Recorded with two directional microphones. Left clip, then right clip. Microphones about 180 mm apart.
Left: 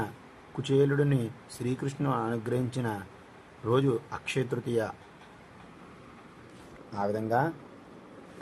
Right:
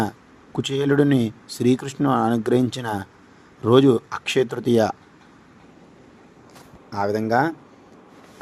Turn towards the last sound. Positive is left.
turn(degrees=-30)  # may be behind; listen again after turning